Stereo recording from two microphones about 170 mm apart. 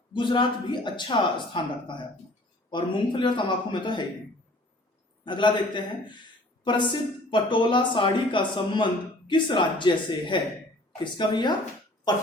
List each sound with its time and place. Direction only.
0.1 s speech: 30° left (ahead or behind)
5.2 s speech: 30° left (ahead or behind)